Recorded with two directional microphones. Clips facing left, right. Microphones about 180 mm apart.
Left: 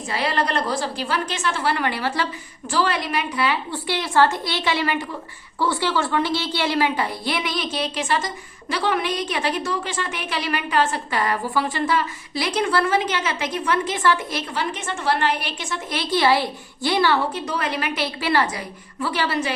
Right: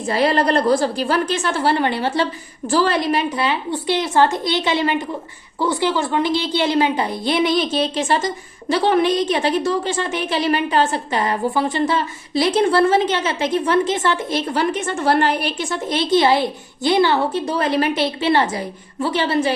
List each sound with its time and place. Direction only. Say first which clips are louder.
0.1 s a woman's voice: right 7 dB; 40° right (ahead or behind)
2.6 s a woman's voice: right 5 dB; 35° right (ahead or behind)
14.4 s a woman's voice: right 7 dB; 40° right (ahead or behind)